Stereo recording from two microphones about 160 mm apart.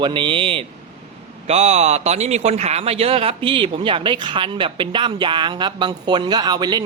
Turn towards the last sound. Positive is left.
turn(degrees=-25)  # may be behind; listen again after turning